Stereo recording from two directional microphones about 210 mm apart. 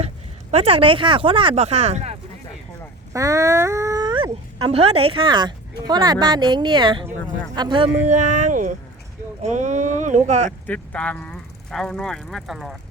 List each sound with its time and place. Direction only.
0.5 s speech: 25° right (ahead or behind)
3.1 s a sound: 15° right (ahead or behind)
4.7 s speech: 30° right (ahead or behind)
8.0 s speech: 35° right (ahead or behind)
10.7 s speech: 5° left (ahead or behind)